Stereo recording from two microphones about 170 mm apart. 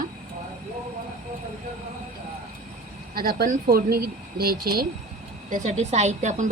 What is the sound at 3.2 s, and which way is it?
Speech, 60° right (ahead or behind).